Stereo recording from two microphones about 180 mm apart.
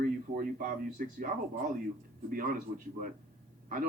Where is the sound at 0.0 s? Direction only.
50° right (ahead or behind).